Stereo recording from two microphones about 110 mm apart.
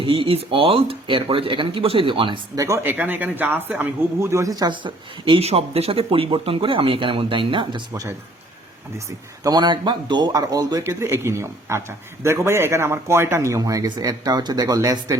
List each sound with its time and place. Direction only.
0.0 s speech: 55° right (ahead or behind)
2.6 s speech: 25° right (ahead or behind)
3.0 s speech: 15° right (ahead or behind)
4.2 s speech: 25° right (ahead or behind); by 5.5 s 50° right (ahead or behind)
5.5 s speech: 65° right (ahead or behind)
9.4 s speech: 40° right (ahead or behind)
10.8 s speech: 25° right (ahead or behind)